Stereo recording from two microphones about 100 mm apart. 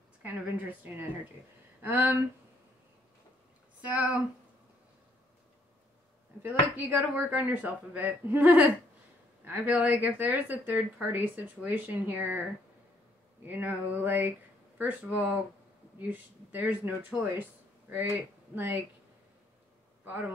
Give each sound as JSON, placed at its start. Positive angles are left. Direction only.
{"t": 0.2, "sound": "speech", "side_deg": -15}
{"t": 1.8, "sound": "a sound", "side_deg": -20}
{"t": 3.8, "sound": "speech", "side_deg": -10}
{"t": 6.4, "sound": "speech", "side_deg": -15}
{"t": 13.5, "sound": "a sound", "side_deg": -20}
{"t": 14.8, "sound": "speech", "side_deg": -15}